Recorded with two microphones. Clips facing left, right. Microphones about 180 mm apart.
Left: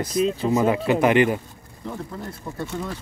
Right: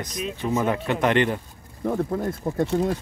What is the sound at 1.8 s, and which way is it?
Speech, 55° right (ahead or behind).